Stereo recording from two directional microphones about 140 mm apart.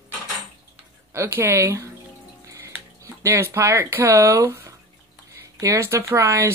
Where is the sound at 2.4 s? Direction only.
20° right (ahead or behind).